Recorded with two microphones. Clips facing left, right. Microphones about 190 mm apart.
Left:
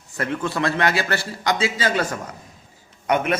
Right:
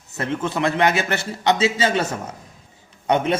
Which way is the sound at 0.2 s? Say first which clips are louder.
Right 1 dB; 20° right (ahead or behind).